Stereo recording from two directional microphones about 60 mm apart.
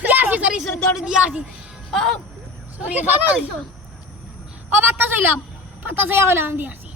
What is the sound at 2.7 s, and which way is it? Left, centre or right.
Speech, right.